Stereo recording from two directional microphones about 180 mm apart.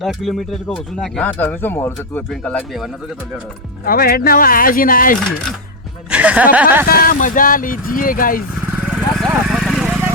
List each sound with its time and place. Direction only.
0.0 s speech: centre (ahead or behind)
3.8 s speech: 55° left (ahead or behind)
6.1 s speech: 5° right (ahead or behind)
6.8 s speech: 55° left (ahead or behind)
8.7 s vehicle: centre (ahead or behind)